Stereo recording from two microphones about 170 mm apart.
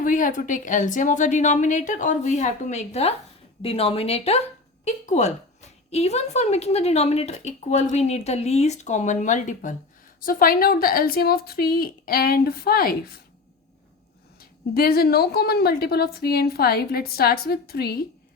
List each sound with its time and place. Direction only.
0.0 s a woman's voice: 50° left (ahead or behind)
14.3 s a woman's voice: 65° left (ahead or behind)